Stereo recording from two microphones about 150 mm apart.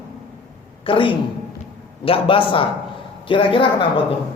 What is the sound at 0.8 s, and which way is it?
Speech, 35° left (ahead or behind).